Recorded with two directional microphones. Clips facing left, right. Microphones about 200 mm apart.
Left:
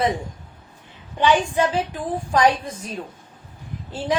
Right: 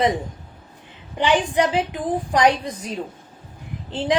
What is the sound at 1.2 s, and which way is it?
A woman's voice, 20° right (ahead or behind).